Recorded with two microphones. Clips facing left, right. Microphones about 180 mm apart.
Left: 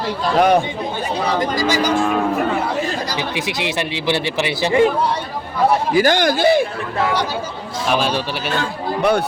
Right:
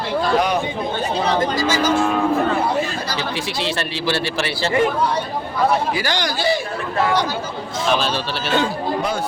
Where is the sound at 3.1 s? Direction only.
15° left (ahead or behind).